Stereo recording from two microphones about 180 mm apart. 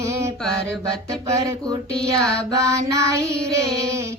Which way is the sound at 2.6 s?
15° right (ahead or behind).